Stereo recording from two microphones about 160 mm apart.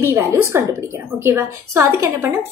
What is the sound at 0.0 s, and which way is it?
A woman's voice, 15° right (ahead or behind).